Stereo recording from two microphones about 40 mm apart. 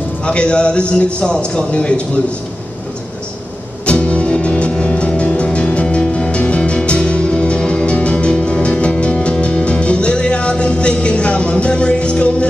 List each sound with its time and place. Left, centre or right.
0.2 s a man's voice: left
3.8 s music: left